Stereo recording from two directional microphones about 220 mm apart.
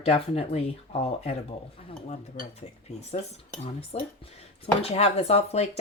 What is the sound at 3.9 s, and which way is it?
Speech, 25° left (ahead or behind).